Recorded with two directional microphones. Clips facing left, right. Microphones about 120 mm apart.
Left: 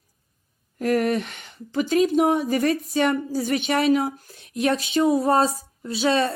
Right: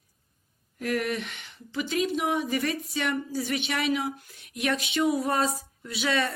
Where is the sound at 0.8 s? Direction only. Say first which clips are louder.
Left 7 dB; 40° left (ahead or behind).